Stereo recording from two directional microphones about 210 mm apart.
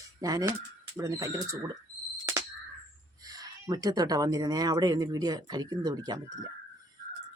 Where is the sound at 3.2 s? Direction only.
20° right (ahead or behind).